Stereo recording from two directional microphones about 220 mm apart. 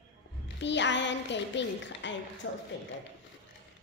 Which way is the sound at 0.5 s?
55° left (ahead or behind).